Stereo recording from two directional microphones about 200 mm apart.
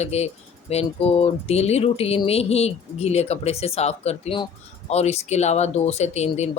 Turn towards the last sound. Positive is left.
turn(degrees=35)  # may be behind; listen again after turning